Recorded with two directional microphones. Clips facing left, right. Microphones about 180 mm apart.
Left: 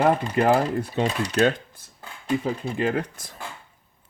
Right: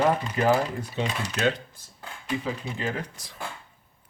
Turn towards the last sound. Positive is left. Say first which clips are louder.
# left 6 dB
turn(degrees=50)  # may be behind; listen again after turning